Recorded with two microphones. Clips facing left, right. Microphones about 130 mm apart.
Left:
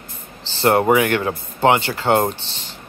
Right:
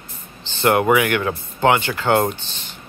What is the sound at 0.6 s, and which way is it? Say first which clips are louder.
Speech: left 1 dB; 30° left (ahead or behind).